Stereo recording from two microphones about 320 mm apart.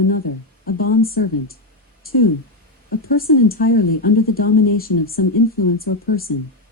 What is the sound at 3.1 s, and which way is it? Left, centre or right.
Speech, left.